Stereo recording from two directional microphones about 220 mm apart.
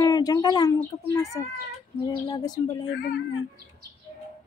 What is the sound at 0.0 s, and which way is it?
Speech, 15° left (ahead or behind).